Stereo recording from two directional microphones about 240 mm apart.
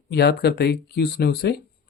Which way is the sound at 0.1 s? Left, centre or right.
Left.